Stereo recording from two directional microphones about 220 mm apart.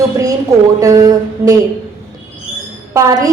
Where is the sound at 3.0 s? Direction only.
15° right (ahead or behind).